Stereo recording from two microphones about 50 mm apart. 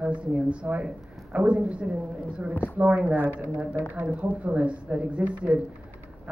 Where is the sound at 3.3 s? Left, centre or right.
Right.